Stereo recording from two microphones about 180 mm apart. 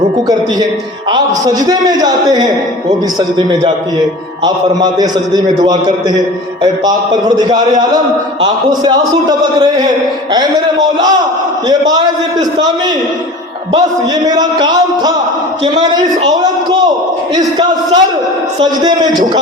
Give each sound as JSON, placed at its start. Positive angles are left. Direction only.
{"t": 1.1, "sound": "a man's voice", "side_deg": -20}
{"t": 4.4, "sound": "a man's voice", "side_deg": -25}
{"t": 6.6, "sound": "a man's voice", "side_deg": -25}
{"t": 14.3, "sound": "a man's voice", "side_deg": -25}
{"t": 17.3, "sound": "a man's voice", "side_deg": -25}